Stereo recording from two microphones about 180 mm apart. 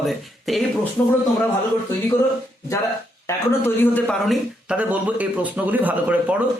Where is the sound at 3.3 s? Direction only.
15° left (ahead or behind).